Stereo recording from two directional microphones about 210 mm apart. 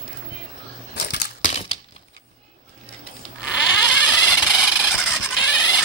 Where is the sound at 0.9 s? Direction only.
50° left (ahead or behind).